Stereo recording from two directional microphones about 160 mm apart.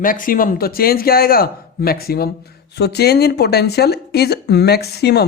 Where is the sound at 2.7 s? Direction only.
90° left.